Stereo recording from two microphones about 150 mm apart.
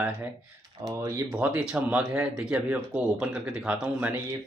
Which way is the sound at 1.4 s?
5° right (ahead or behind).